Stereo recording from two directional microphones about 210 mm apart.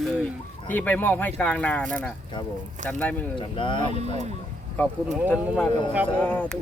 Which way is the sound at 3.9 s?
30° right (ahead or behind).